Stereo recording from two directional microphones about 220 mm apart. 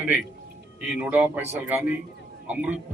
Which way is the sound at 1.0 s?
10° right (ahead or behind).